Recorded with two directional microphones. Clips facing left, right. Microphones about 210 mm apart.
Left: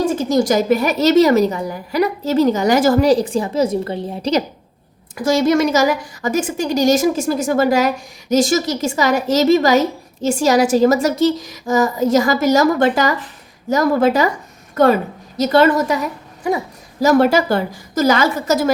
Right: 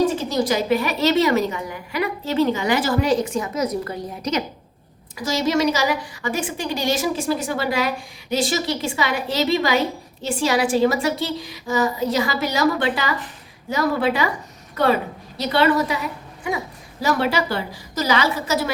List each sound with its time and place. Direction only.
0.1 s a woman's voice: 45° left (ahead or behind)
5.1 s a woman's voice: 50° left (ahead or behind)
17.0 s a woman's voice: 45° left (ahead or behind)